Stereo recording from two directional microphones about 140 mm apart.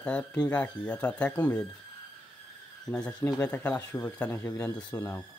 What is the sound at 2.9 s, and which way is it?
Speech, 10° left (ahead or behind).